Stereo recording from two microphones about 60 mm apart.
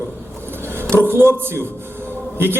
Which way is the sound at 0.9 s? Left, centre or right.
Right.